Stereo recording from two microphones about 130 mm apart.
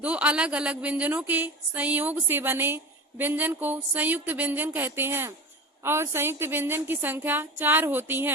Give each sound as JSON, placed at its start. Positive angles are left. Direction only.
{"t": 0.0, "sound": "a woman's voice", "side_deg": -10}